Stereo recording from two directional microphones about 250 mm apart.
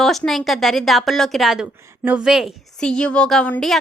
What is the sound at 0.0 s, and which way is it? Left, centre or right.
A woman's voice, centre.